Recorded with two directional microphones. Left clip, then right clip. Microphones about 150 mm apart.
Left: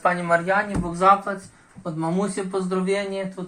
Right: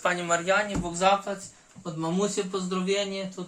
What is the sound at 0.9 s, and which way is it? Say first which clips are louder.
Speech: left 6 dB; 35° left (ahead or behind).